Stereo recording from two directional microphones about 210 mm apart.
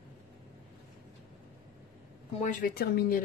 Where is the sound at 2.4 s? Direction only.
40° left (ahead or behind).